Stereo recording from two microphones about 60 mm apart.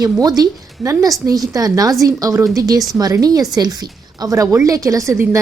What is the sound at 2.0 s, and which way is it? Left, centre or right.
Speech, right.